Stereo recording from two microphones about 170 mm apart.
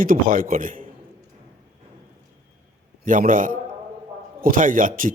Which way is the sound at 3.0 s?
50° right (ahead or behind).